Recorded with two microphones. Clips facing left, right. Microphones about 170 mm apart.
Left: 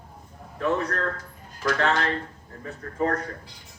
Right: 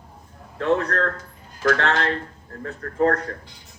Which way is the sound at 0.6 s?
70° right (ahead or behind).